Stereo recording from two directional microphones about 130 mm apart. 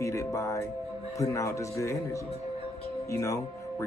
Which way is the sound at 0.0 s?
25° left (ahead or behind).